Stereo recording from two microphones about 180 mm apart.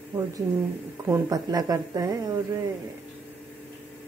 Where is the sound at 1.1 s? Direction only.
20° right (ahead or behind).